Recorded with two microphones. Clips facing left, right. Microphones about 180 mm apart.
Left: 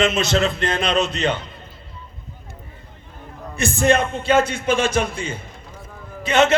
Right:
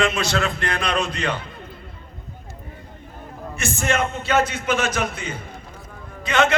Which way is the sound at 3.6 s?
35° left (ahead or behind).